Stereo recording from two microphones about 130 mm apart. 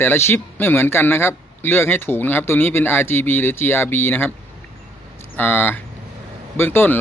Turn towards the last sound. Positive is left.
turn(degrees=15)  # may be behind; listen again after turning